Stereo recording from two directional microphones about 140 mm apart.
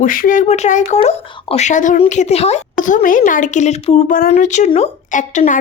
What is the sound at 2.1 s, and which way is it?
Speech, 55° left (ahead or behind).